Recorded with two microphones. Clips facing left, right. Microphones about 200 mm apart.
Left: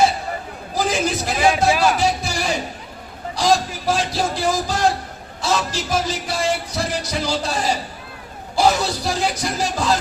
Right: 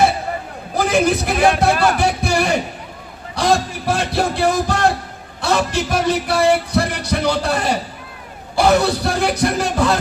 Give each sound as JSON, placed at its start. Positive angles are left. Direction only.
{"t": 0.8, "sound": "a man's voice", "side_deg": -60}
{"t": 2.0, "sound": "music", "side_deg": -60}
{"t": 3.3, "sound": "a man's voice", "side_deg": -60}